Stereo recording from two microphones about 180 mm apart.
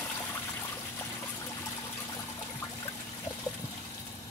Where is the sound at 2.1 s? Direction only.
20° left (ahead or behind).